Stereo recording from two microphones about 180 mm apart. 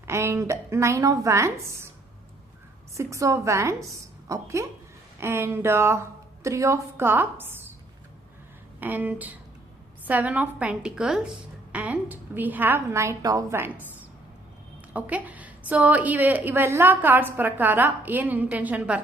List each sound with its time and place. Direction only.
0.0 s a woman's voice: 15° right (ahead or behind)
2.9 s a woman's voice: 15° right (ahead or behind)
8.8 s a woman's voice: 10° right (ahead or behind)
14.9 s a woman's voice: 10° right (ahead or behind)